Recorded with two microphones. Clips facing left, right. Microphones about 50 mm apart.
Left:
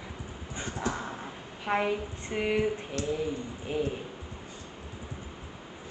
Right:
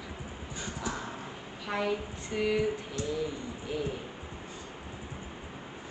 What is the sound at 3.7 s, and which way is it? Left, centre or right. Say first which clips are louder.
Speech: left 4 dB; left.